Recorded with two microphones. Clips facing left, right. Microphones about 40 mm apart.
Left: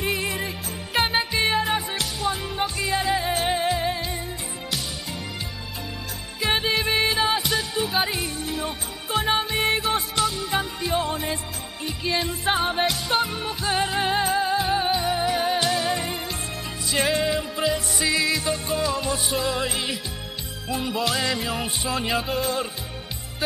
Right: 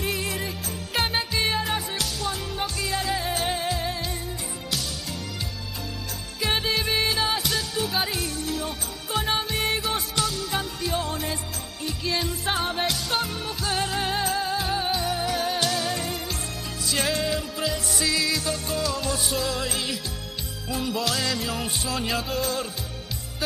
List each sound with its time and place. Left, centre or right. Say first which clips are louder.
0.0 s music: left 2 dB; centre
6.4 s music: left 2 dB; centre